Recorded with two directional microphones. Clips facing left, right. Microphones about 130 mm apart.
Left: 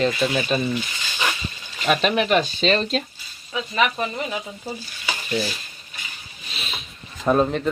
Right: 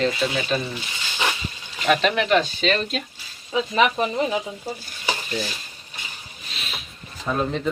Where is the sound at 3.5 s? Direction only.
25° right (ahead or behind).